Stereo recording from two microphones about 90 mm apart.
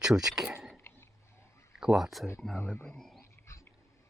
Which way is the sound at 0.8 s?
25° left (ahead or behind).